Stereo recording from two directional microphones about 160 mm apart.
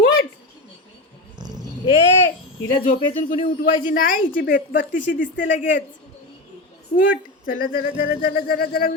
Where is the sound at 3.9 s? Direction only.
60° left (ahead or behind).